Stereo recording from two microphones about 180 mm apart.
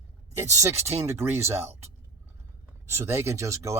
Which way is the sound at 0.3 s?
15° right (ahead or behind).